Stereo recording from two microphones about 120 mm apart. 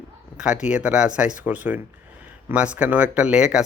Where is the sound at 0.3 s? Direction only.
10° right (ahead or behind).